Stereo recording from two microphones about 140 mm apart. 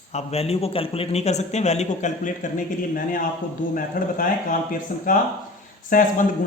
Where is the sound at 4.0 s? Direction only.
75° left (ahead or behind).